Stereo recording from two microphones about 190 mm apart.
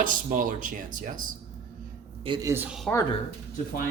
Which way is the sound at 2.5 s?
10° right (ahead or behind).